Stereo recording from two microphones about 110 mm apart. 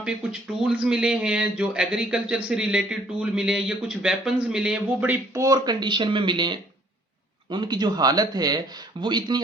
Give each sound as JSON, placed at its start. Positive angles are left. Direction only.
{"t": 0.0, "sound": "speech", "side_deg": -10}
{"t": 5.3, "sound": "speech", "side_deg": -30}